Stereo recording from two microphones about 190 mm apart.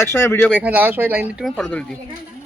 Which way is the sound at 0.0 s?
15° left (ahead or behind).